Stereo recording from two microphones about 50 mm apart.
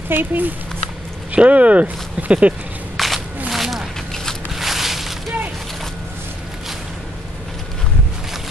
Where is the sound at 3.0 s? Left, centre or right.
Centre.